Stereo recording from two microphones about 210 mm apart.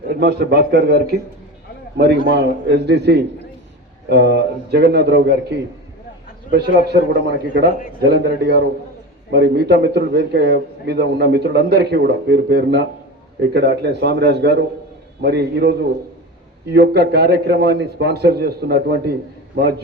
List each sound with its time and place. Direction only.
0.2 s a man's voice: 50° right (ahead or behind)
2.3 s a man's voice: 55° right (ahead or behind)